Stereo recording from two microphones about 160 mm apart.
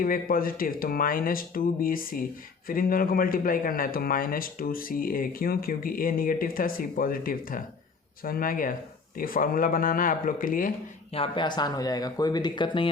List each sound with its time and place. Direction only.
0.0 s speech: 60° left (ahead or behind)
11.1 s speech: 35° left (ahead or behind)